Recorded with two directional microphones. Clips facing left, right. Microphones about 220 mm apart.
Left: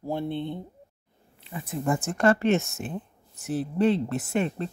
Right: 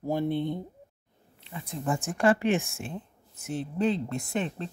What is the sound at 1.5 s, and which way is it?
Speech, 5° left (ahead or behind).